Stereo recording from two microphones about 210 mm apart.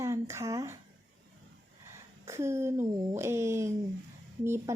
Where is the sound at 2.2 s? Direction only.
15° right (ahead or behind).